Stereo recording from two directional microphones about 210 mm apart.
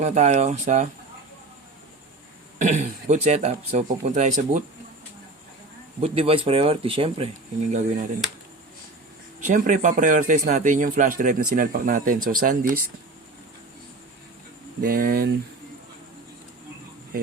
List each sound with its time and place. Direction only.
0.0 s a man's voice: 35° right (ahead or behind)
2.6 s a man's voice: 35° right (ahead or behind)
6.0 s a man's voice: 25° right (ahead or behind)
9.4 s a man's voice: 40° right (ahead or behind)
14.8 s speech: 45° right (ahead or behind)